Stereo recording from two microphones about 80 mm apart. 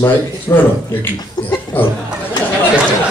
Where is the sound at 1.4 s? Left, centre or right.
Left.